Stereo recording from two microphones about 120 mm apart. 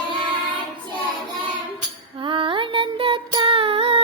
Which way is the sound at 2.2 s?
45° right (ahead or behind).